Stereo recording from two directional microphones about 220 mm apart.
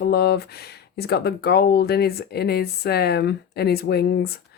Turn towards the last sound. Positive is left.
turn(degrees=45)  # may be behind; listen again after turning